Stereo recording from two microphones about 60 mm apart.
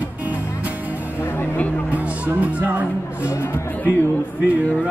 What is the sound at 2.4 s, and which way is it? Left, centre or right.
Music, right.